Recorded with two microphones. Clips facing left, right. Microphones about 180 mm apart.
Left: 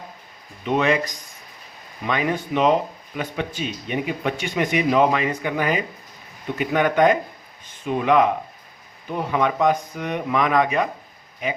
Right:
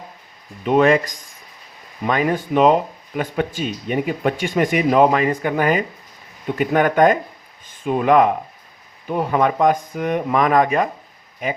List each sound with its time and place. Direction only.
0.6 s speech: 50° right (ahead or behind)
2.0 s speech: 45° right (ahead or behind)